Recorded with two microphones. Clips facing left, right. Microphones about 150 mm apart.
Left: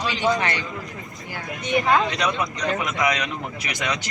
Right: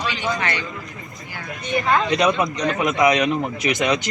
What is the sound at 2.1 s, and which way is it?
A man's voice, 20° right (ahead or behind).